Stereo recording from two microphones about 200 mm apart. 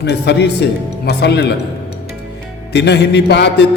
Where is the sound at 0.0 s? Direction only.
55° left (ahead or behind).